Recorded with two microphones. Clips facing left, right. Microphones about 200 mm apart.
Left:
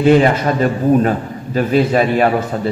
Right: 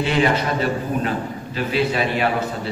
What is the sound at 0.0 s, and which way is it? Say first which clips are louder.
A man's voice: left 8 dB; 45° left (ahead or behind).